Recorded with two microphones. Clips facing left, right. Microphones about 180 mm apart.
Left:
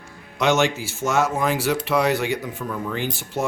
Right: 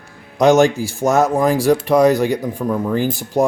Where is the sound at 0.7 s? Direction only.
15° right (ahead or behind).